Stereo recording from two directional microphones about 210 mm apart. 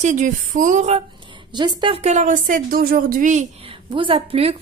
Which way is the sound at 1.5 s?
20° right (ahead or behind).